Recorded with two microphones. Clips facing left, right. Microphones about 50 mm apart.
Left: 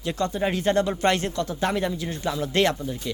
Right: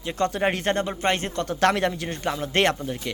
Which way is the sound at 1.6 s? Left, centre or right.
Right.